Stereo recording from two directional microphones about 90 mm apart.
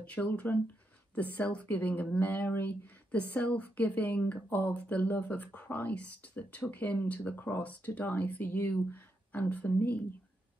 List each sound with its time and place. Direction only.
0.0 s a woman's voice: 15° left (ahead or behind)